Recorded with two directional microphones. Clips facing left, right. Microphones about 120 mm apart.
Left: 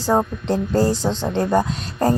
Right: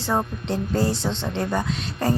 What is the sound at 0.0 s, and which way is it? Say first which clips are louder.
Speech: left 5 dB; 40° left (ahead or behind).